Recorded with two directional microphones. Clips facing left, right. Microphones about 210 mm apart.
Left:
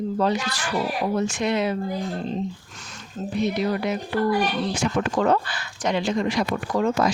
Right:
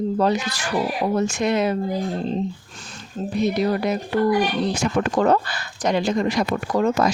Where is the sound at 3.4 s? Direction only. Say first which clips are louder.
Right 3 dB; 40° right (ahead or behind).